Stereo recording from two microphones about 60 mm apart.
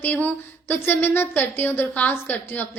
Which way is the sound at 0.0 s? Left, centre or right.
Left.